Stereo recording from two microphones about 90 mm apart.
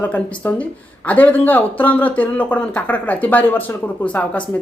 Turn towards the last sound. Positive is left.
turn(degrees=15)  # may be behind; listen again after turning